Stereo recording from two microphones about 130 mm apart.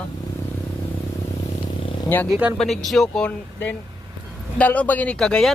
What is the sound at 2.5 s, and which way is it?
Speech, 5° left (ahead or behind).